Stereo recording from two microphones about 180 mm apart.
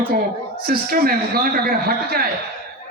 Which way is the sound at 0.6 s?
60° right (ahead or behind).